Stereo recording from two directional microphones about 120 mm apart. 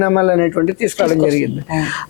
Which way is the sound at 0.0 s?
25° left (ahead or behind).